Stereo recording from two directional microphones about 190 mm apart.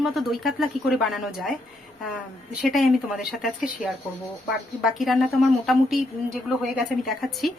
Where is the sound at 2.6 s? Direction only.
Centre (ahead or behind).